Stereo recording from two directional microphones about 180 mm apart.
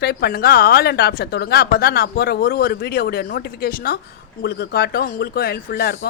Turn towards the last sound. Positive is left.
turn(degrees=60)  # may be behind; listen again after turning